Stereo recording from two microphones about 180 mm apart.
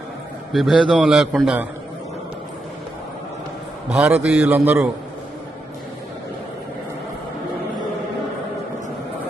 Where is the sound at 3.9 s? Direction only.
10° right (ahead or behind).